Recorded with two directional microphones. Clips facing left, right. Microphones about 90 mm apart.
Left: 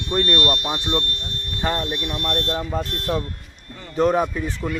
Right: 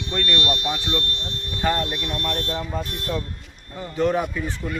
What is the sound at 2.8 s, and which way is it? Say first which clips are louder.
Speech: left 3 dB; 50° left (ahead or behind).